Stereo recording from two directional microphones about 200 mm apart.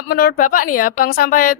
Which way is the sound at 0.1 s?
45° left (ahead or behind).